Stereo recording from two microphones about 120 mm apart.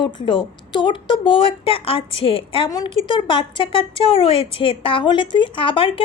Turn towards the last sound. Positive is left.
turn(degrees=45)  # may be behind; listen again after turning